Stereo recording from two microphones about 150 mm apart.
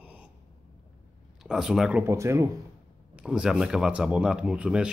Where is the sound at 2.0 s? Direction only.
20° right (ahead or behind).